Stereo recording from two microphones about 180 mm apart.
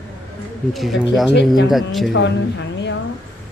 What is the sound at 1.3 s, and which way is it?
Speech, 75° left (ahead or behind).